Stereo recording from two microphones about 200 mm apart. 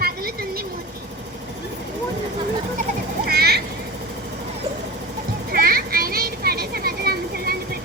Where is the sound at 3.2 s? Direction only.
50° right (ahead or behind).